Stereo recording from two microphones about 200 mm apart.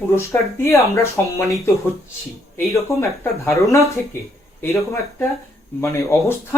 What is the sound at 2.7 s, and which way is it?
Speech, 15° left (ahead or behind).